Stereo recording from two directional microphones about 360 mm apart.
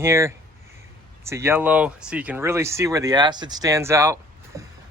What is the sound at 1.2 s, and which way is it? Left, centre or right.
Speech, centre.